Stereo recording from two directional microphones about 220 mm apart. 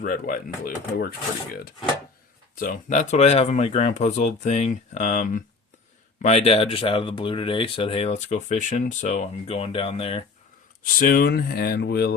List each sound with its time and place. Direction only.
0.0 s speech: 40° left (ahead or behind)
2.6 s speech: 35° left (ahead or behind)
10.9 s speech: 40° left (ahead or behind)